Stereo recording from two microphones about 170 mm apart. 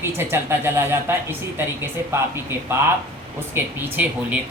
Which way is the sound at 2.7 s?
15° right (ahead or behind).